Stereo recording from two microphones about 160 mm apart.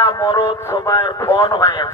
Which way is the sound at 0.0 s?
15° left (ahead or behind).